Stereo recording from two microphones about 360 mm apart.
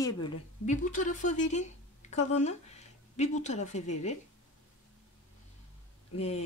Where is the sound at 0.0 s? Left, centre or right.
Centre.